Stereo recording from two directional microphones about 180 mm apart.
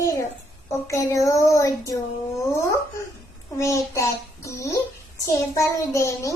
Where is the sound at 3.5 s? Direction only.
15° left (ahead or behind).